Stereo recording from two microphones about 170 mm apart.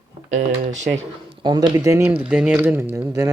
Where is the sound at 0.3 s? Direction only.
45° right (ahead or behind).